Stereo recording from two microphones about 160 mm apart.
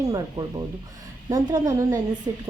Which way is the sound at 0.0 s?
20° right (ahead or behind).